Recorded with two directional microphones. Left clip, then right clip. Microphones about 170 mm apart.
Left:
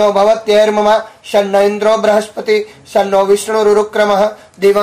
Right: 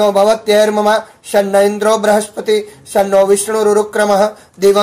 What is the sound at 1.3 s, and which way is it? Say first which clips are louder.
Speech: even; 35° right (ahead or behind).